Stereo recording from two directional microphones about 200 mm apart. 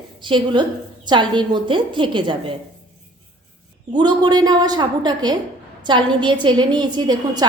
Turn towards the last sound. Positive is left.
turn(degrees=-20)  # may be behind; listen again after turning